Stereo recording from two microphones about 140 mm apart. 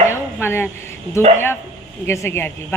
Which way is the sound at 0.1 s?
15° left (ahead or behind).